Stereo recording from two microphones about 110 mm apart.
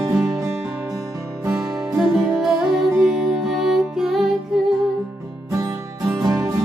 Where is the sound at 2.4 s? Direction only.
5° right (ahead or behind).